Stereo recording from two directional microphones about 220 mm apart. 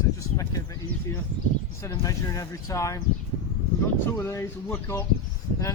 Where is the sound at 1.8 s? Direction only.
15° left (ahead or behind).